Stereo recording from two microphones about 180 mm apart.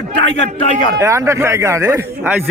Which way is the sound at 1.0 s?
15° right (ahead or behind).